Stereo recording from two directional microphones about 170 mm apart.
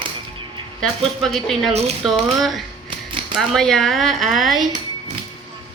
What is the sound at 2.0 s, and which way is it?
Speech, centre (ahead or behind).